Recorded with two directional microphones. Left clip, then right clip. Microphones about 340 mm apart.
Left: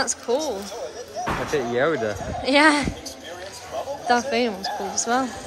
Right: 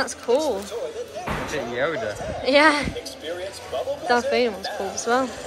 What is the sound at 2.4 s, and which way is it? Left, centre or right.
Speech, centre.